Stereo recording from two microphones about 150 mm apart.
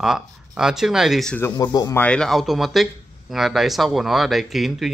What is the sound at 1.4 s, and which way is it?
Speech, 25° left (ahead or behind).